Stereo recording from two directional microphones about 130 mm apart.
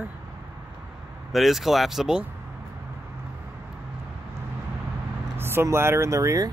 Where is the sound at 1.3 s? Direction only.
Centre (ahead or behind).